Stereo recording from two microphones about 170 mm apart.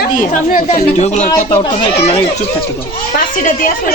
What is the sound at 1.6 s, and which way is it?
Speech, 30° left (ahead or behind).